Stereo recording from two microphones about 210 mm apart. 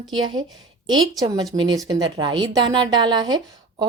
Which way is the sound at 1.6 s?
20° right (ahead or behind).